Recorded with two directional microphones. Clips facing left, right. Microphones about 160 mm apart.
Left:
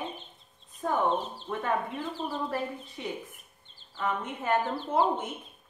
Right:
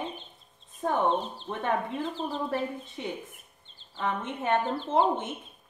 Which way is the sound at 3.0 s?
25° right (ahead or behind).